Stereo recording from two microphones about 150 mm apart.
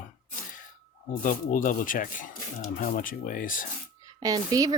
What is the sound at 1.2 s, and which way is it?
Speech, 65° left (ahead or behind).